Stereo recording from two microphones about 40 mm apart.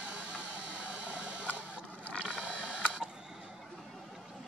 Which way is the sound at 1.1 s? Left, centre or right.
Right.